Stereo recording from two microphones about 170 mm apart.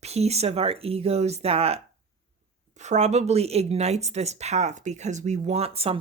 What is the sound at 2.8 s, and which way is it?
Speech, 40° right (ahead or behind).